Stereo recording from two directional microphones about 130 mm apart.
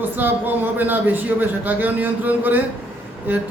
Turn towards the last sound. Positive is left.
turn(degrees=-15)  # may be behind; listen again after turning